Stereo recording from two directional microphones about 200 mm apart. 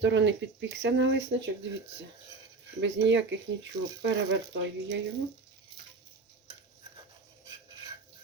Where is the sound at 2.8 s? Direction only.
65° right (ahead or behind).